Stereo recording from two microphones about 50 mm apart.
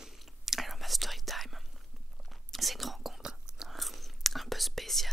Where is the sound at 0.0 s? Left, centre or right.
Centre.